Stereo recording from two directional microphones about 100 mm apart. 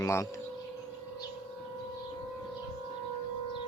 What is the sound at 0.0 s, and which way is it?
Speech, 30° left (ahead or behind).